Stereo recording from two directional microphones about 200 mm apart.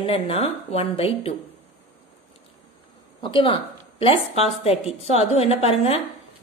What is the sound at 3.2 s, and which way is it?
A woman's voice, 25° left (ahead or behind).